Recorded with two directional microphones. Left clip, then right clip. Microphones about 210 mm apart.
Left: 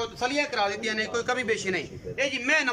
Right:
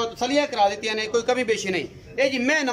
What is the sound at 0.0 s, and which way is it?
Speech, 15° right (ahead or behind).